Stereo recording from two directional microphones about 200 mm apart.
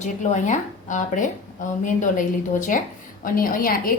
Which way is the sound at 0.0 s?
35° left (ahead or behind).